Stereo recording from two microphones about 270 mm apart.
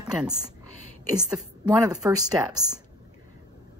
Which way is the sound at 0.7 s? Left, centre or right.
Right.